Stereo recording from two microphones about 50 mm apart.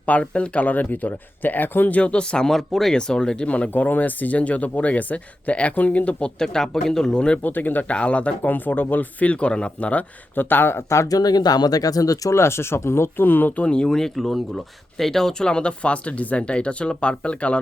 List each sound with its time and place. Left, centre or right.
0.0 s speech: left
2.0 s a man's voice: left
3.7 s speech: left
6.4 s a man's voice: centre
7.4 s speech: left
7.9 s speech: left
8.4 s speech: left
10.3 s speech: left
12.3 s speech: left
13.6 s speech: left
13.8 s speech: centre